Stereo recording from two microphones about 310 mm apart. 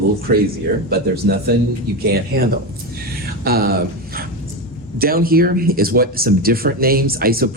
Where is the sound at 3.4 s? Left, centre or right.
Right.